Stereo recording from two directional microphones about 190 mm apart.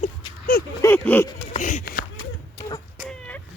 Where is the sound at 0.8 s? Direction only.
10° left (ahead or behind).